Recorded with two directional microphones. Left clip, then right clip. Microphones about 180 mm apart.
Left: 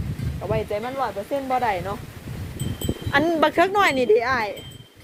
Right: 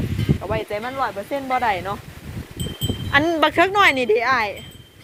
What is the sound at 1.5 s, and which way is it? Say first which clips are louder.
Speech: right 3 dB; centre (ahead or behind).